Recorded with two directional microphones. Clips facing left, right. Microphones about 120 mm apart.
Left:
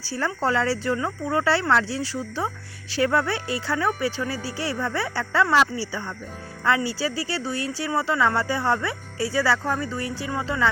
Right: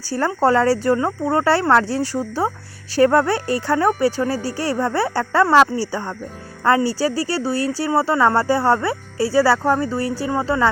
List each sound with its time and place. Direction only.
0.1 s a woman's voice: 45° right (ahead or behind)